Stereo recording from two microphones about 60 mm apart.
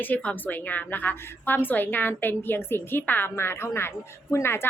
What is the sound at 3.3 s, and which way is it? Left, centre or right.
Speech, left.